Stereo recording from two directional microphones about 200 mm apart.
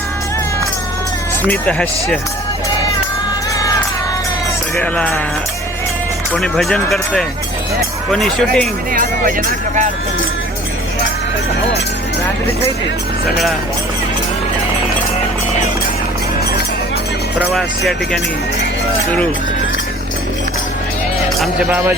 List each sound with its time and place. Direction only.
1.5 s speech: 5° left (ahead or behind)
4.8 s speech: 5° left (ahead or behind)
6.3 s speech: 5° left (ahead or behind)
8.9 s speech: 45° right (ahead or behind)
17.3 s speech: 5° right (ahead or behind)
21.3 s speech: centre (ahead or behind)